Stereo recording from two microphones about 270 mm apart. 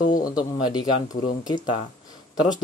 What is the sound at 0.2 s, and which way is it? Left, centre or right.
Speech, centre.